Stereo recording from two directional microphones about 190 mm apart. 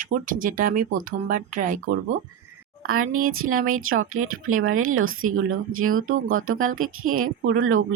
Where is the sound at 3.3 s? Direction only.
90° right.